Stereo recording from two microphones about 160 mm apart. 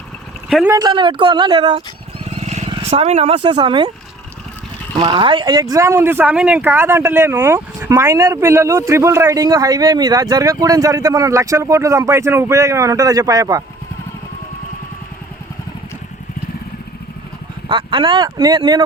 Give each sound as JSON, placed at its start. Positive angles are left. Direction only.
{"t": 0.7, "sound": "speech", "side_deg": -25}
{"t": 2.2, "sound": "vehicle", "side_deg": -40}
{"t": 2.9, "sound": "speech", "side_deg": -40}
{"t": 4.9, "sound": "speech", "side_deg": -35}
{"t": 17.7, "sound": "speech", "side_deg": -30}